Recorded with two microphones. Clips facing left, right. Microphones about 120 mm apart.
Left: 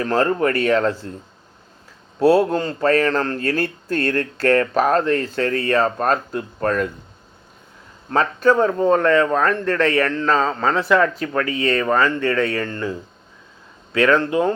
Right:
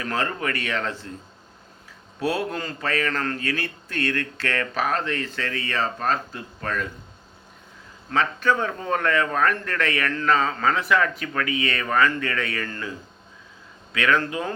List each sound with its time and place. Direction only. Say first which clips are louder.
0.0 s speech: left 9 dB; 35° left (ahead or behind)
2.1 s speech: left 11 dB; 35° left (ahead or behind)
8.1 s speech: left 6 dB; 40° left (ahead or behind); by 12.9 s 25° left (ahead or behind)
13.9 s speech: left 7 dB; 35° left (ahead or behind)